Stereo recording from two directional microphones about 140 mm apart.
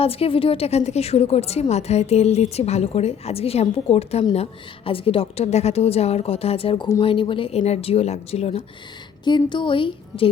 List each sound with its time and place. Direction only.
0.0 s a woman's voice: 45° left (ahead or behind)
9.2 s a woman's voice: 35° left (ahead or behind)